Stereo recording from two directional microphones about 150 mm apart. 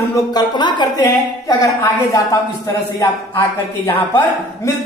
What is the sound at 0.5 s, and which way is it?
Speech, 30° left (ahead or behind).